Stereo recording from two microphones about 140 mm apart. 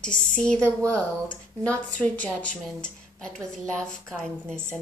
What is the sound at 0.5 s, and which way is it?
Speech, 20° right (ahead or behind).